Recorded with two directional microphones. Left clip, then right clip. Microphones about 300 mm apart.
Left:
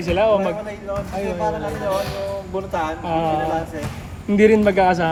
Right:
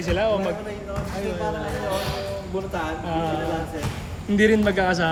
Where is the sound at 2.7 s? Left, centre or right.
Centre.